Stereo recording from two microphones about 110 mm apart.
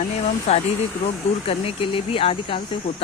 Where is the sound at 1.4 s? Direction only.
60° left (ahead or behind).